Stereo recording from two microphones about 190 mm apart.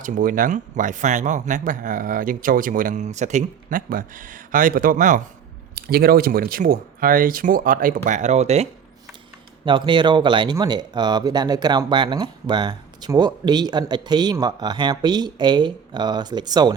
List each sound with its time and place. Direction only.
0.0 s speech: 45° right (ahead or behind)
9.6 s speech: 25° right (ahead or behind)